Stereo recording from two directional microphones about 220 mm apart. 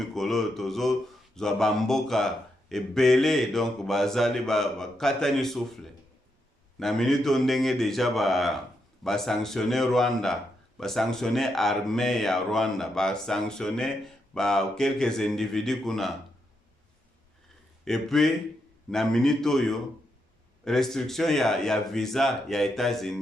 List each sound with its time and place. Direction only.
0.1 s speech: centre (ahead or behind)
17.8 s speech: centre (ahead or behind)